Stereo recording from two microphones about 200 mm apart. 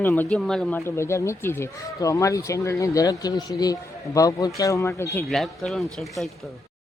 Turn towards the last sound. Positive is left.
turn(degrees=0)  # may be behind; listen again after turning